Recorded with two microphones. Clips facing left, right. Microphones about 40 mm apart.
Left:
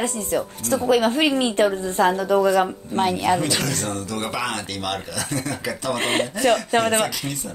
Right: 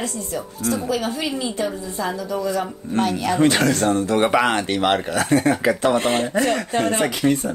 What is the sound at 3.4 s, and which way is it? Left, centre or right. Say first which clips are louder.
Speech: right 7 dB; right.